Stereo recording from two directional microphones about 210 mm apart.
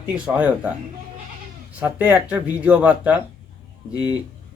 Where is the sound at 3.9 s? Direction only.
20° left (ahead or behind).